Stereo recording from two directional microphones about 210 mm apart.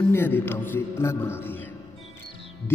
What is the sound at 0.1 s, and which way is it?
Speech, 10° left (ahead or behind).